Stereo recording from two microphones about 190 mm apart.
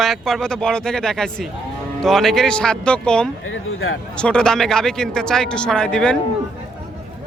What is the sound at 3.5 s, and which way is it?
Speech, 90° left.